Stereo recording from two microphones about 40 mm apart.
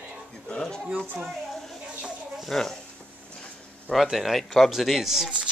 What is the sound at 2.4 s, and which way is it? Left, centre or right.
Speech, centre.